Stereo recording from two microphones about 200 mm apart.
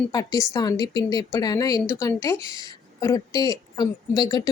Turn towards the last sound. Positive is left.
turn(degrees=20)  # may be behind; listen again after turning